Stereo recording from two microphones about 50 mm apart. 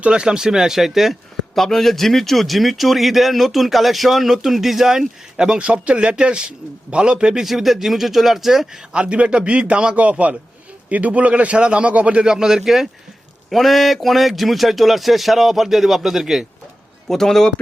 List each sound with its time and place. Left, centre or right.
0.0 s speech: centre
7.4 s speech: centre
8.9 s a man's voice: right
12.2 s speech: centre
17.1 s a man's voice: centre